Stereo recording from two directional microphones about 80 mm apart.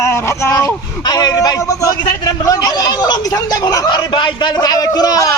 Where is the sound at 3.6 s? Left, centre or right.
Left.